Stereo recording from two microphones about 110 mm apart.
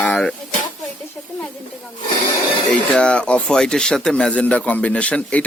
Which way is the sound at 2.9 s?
10° left (ahead or behind).